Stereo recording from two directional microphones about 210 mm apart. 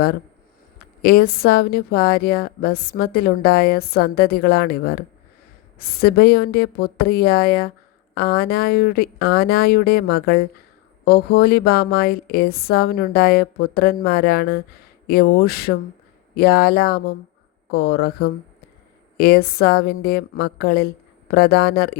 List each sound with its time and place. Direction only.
1.0 s a woman's voice: 45° left (ahead or behind)